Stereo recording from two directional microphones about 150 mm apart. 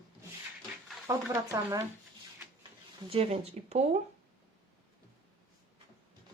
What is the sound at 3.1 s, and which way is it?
Speech, 40° right (ahead or behind).